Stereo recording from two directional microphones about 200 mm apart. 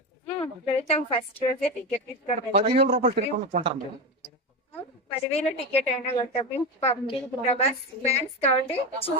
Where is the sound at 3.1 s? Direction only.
45° right (ahead or behind).